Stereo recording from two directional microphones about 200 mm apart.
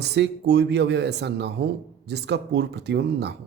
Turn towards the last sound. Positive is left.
turn(degrees=-55)  # may be behind; listen again after turning